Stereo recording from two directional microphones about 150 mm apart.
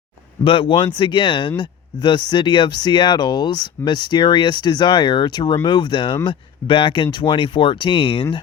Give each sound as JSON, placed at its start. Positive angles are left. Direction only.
{"t": 0.4, "sound": "speech", "side_deg": 35}